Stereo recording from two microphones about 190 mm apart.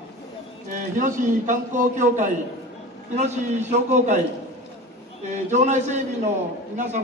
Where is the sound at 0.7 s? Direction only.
45° right (ahead or behind).